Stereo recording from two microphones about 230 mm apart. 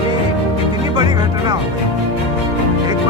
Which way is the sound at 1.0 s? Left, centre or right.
Centre.